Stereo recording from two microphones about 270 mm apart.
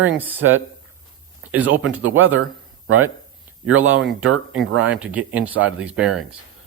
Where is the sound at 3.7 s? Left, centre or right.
Right.